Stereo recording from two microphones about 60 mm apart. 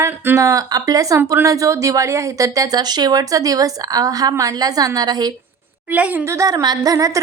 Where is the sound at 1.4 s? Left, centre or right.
Right.